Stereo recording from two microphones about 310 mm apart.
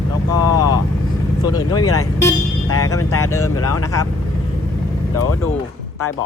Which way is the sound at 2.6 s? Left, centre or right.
Left.